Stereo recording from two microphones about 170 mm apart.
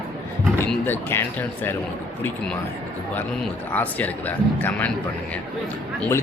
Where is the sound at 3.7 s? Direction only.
10° left (ahead or behind).